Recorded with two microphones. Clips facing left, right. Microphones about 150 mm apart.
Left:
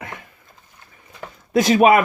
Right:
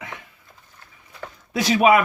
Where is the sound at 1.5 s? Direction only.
45° left (ahead or behind).